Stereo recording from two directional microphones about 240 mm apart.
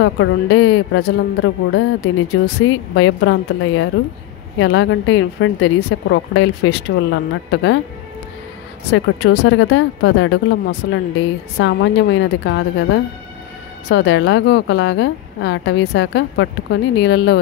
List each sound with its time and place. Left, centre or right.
0.0 s speech: left
8.9 s speech: left